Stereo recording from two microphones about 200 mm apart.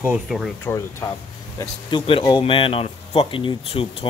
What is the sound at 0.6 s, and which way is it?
Speech, 15° left (ahead or behind).